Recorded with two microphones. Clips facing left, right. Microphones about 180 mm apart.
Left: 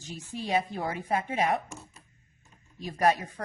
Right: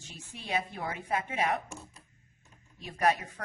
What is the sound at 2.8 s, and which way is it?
Speech, 35° left (ahead or behind).